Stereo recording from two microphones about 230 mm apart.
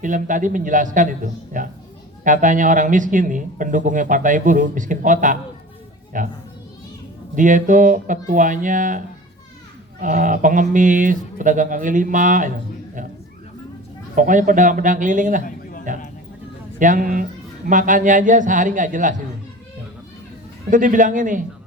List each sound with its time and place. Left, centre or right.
0.0 s speech: right
7.3 s speech: right
10.0 s speech: right
14.2 s speech: right
20.7 s speech: right